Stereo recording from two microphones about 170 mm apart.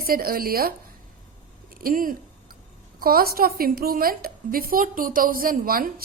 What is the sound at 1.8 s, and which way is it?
A woman's voice, 55° right (ahead or behind).